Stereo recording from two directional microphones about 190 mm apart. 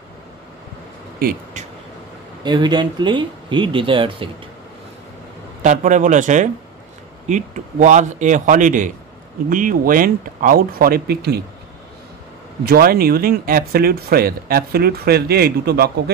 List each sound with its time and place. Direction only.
1.2 s a sound: 40° right (ahead or behind)
2.4 s speech: 25° right (ahead or behind)
5.6 s a man's voice: 40° right (ahead or behind); by 11.4 s 55° right (ahead or behind)
12.6 s speech: 50° right (ahead or behind)